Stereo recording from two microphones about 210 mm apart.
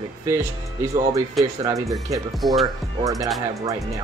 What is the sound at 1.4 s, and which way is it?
Speech, centre (ahead or behind).